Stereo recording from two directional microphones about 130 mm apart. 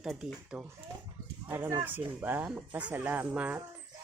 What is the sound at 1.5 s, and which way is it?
Speech, 20° right (ahead or behind).